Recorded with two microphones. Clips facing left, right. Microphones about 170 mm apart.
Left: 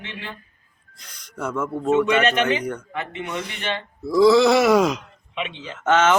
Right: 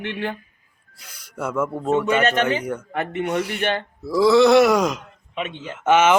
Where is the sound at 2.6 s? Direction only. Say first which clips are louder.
Right 1 dB; 5° right (ahead or behind).